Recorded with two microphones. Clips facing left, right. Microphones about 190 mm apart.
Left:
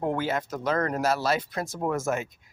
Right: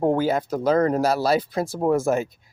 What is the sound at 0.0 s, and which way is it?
Speech, 35° right (ahead or behind).